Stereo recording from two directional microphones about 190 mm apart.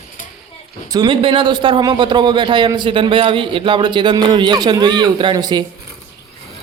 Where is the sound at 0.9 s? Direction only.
20° right (ahead or behind).